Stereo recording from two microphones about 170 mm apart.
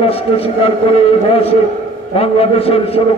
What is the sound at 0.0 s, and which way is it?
Speech, 35° left (ahead or behind).